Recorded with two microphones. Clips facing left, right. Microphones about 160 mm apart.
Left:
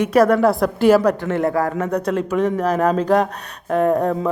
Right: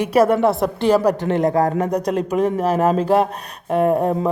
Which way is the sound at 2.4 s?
35° right (ahead or behind).